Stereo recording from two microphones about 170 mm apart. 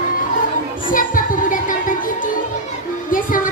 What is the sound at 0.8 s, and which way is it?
Music, 55° left (ahead or behind).